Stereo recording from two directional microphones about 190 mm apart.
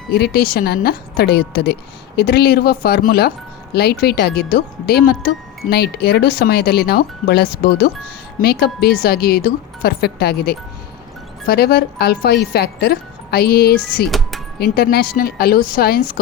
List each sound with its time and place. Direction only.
0.1 s a woman's voice: 55° left (ahead or behind)
14.1 s music: centre (ahead or behind)
14.6 s speech: 55° left (ahead or behind)